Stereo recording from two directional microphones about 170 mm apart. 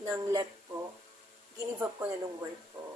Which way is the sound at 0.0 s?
15° right (ahead or behind).